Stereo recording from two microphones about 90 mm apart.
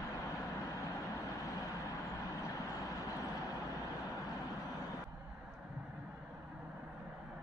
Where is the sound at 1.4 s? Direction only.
35° left (ahead or behind).